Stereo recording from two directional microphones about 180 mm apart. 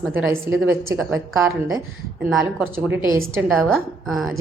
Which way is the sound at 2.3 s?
15° right (ahead or behind).